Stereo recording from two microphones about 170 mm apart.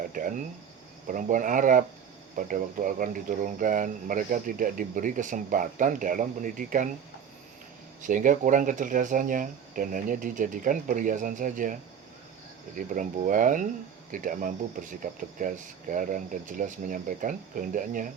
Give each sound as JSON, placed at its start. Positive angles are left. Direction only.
{"t": 0.1, "sound": "speech", "side_deg": -55}
{"t": 8.0, "sound": "speech", "side_deg": -50}
{"t": 12.7, "sound": "speech", "side_deg": -50}